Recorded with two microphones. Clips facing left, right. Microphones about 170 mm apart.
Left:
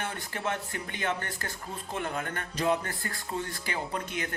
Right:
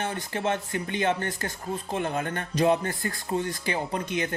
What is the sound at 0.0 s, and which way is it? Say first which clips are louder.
A man's voice: right 5 dB; 25° right (ahead or behind).